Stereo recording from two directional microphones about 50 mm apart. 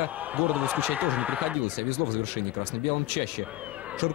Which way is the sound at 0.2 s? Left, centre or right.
Right.